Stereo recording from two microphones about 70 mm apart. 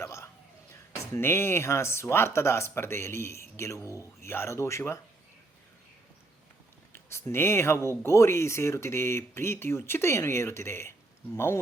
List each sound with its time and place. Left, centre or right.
0.0 s cough: left
0.9 s speech: left
6.9 s speech: left